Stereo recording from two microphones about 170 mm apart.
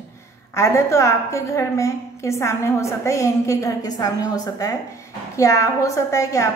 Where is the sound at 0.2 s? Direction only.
15° left (ahead or behind).